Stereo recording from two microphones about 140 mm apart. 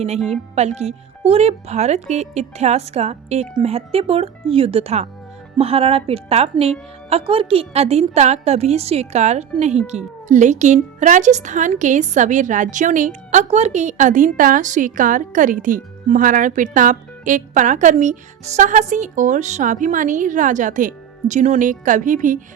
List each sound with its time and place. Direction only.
0.5 s speech: 50° right (ahead or behind)